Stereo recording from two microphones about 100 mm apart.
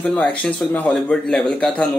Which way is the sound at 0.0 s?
15° left (ahead or behind).